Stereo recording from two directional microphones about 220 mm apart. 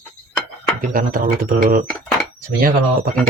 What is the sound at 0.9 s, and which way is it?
Speech, 40° right (ahead or behind).